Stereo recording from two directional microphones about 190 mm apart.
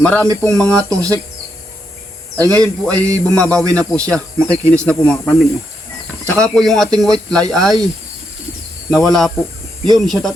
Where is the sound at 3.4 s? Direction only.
5° left (ahead or behind).